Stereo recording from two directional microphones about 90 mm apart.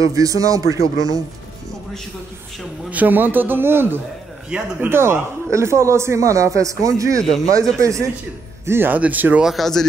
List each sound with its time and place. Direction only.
0.0 s speech: 40° right (ahead or behind)
2.9 s a man's voice: 20° right (ahead or behind)
4.8 s speech: 25° right (ahead or behind)
8.6 s a man's voice: 25° right (ahead or behind)
9.4 s speech: centre (ahead or behind)